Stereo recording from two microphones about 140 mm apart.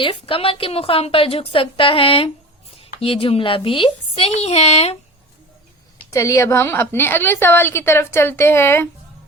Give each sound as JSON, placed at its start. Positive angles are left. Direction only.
{"t": 0.0, "sound": "a woman's voice", "side_deg": 40}
{"t": 6.1, "sound": "a woman's voice", "side_deg": 25}